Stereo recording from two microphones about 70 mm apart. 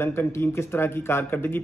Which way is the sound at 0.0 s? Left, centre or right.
Left.